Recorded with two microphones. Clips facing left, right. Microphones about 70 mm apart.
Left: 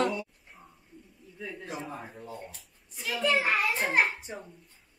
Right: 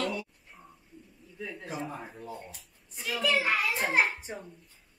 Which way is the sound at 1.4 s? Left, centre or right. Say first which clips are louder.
Right 1 dB; centre.